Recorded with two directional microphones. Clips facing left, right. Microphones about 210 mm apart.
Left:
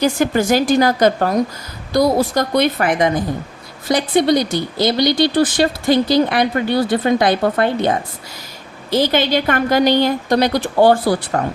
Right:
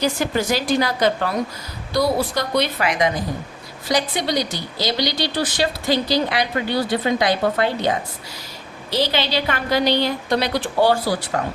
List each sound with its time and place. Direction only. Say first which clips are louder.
0.0 s speech: left 5 dB; 50° left (ahead or behind)